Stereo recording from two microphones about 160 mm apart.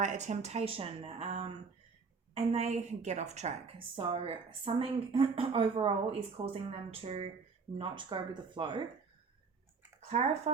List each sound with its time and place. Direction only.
0.0 s a woman's voice: 50° right (ahead or behind); by 8.8 s 30° right (ahead or behind)
10.1 s speech: 45° right (ahead or behind)